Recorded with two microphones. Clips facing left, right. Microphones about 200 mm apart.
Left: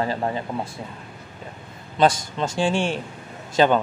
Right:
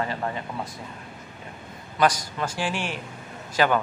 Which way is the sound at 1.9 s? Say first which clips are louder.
Left 3 dB; 25° left (ahead or behind).